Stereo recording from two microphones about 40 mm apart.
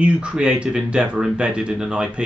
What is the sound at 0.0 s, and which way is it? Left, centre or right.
Speech, right.